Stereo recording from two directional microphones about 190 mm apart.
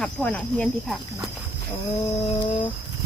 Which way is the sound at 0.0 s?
5° left (ahead or behind).